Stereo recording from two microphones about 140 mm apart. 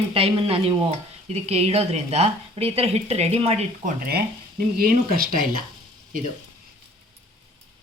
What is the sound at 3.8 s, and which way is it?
Speech, 90° right.